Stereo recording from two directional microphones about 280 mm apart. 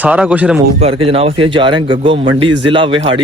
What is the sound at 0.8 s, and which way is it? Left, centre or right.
Speech, centre.